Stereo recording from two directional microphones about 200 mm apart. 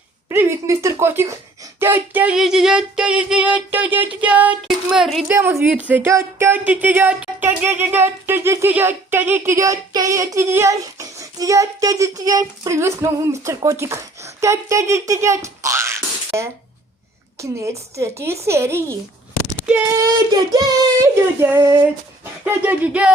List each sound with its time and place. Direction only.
0.3 s a sound: 10° right (ahead or behind)
4.2 s music: 5° right (ahead or behind)
4.9 s a sound: centre (ahead or behind)
5.3 s music: 10° right (ahead or behind)
20.0 s child singing: 20° right (ahead or behind)
22.2 s speech: 10° right (ahead or behind)